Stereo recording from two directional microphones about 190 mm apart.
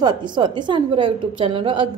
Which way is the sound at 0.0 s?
25° right (ahead or behind).